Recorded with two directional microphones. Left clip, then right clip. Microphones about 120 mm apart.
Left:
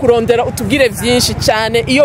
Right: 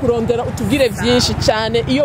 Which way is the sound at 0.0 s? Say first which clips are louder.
Left 6 dB; 15° left (ahead or behind).